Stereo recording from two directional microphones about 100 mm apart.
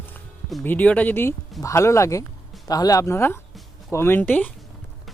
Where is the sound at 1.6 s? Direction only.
30° left (ahead or behind).